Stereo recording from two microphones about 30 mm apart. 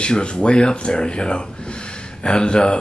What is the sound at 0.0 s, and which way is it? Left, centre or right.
Speech, left.